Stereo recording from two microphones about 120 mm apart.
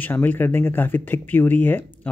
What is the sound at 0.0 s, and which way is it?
Speech, 15° left (ahead or behind).